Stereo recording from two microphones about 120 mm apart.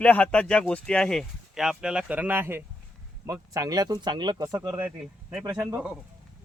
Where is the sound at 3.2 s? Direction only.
30° right (ahead or behind).